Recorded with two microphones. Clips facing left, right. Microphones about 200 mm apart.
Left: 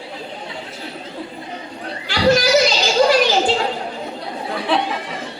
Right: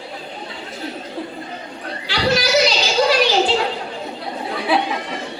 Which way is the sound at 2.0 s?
50° left (ahead or behind).